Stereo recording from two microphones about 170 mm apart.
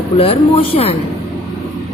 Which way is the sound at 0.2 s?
35° left (ahead or behind).